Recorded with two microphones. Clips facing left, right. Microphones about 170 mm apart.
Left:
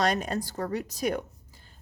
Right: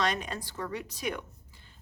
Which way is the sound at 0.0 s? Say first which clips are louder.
Left 5 dB; 40° left (ahead or behind).